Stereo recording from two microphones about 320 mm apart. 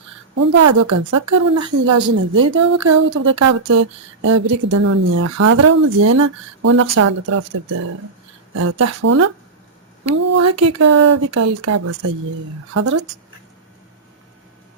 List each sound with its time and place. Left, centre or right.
0.3 s a woman's voice: right
3.1 s a sound: right
4.4 s a woman's voice: right